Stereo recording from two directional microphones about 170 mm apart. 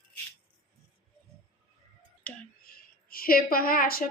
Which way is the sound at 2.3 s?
10° left (ahead or behind).